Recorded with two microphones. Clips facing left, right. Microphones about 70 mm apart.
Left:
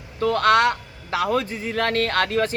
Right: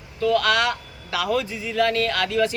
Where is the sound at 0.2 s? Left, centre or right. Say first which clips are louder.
Left 2 dB; left.